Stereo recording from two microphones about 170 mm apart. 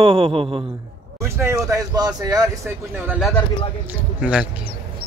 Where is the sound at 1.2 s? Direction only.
15° right (ahead or behind).